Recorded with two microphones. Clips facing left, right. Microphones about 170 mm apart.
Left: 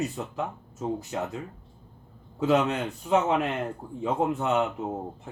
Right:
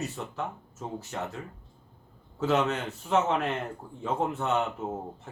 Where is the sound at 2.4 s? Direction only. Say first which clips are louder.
Left 3 dB; 15° left (ahead or behind).